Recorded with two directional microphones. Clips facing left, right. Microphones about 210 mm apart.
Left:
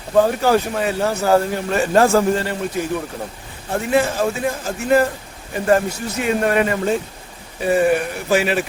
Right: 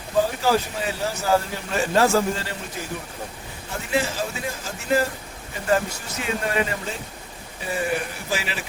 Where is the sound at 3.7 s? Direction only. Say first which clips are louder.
Left 7 dB; 55° left (ahead or behind).